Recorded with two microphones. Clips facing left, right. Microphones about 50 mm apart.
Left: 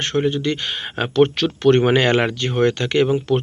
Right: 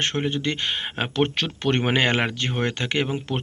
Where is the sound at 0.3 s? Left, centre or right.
Right.